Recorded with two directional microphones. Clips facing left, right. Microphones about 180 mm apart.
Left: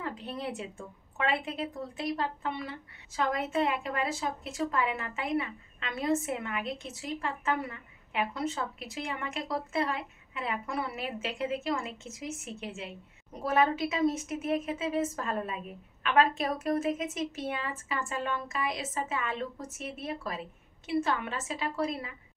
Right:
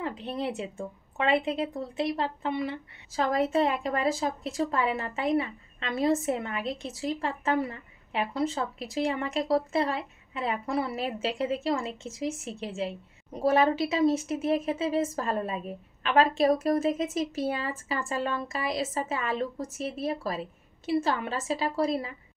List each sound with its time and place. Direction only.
0.0 s a woman's voice: 25° right (ahead or behind)
3.3 s a woman's voice: 35° right (ahead or behind)